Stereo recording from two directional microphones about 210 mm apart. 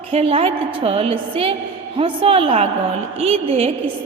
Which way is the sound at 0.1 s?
25° right (ahead or behind).